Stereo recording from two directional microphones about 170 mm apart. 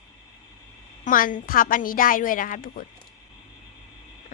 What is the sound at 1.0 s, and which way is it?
A woman's voice, 50° left (ahead or behind).